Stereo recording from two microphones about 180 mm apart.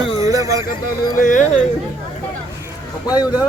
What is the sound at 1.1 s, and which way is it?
Speech, 45° left (ahead or behind).